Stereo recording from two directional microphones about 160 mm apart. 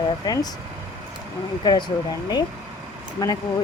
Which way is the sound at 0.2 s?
25° left (ahead or behind).